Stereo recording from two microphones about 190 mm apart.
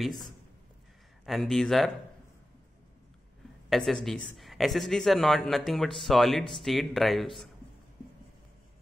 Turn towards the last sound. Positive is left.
turn(degrees=0)  # may be behind; listen again after turning